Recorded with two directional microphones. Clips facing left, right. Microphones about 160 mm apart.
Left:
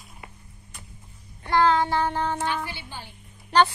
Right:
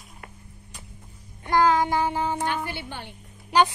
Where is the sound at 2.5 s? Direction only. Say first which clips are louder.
Right 1 dB; 55° right (ahead or behind).